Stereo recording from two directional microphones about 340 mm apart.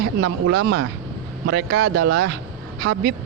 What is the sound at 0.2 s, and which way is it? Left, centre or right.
Speech, right.